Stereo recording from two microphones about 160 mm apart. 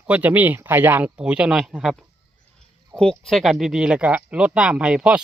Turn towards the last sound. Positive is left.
turn(degrees=-5)  # may be behind; listen again after turning